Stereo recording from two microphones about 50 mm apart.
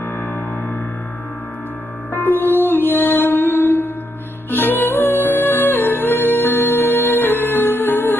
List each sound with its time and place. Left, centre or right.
0.0 s music: left
2.1 s music: left